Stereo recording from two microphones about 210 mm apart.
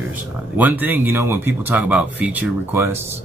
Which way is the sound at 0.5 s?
10° right (ahead or behind).